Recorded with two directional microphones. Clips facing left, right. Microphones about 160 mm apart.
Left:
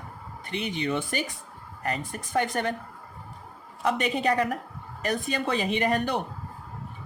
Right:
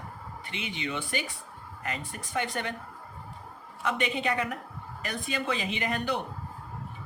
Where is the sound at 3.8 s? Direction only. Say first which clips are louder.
Left 4 dB; 40° left (ahead or behind).